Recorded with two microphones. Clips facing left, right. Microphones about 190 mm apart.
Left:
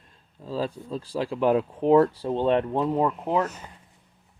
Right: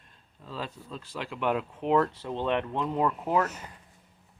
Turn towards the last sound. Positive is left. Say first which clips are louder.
# left 2 dB
turn(degrees=25)  # may be behind; listen again after turning